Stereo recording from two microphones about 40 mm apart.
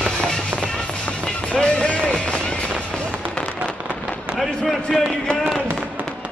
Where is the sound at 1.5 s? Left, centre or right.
Left.